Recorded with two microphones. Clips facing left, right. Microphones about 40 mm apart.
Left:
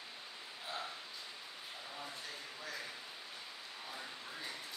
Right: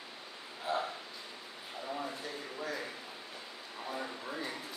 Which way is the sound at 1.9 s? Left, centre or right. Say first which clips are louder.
Right 11 dB; right.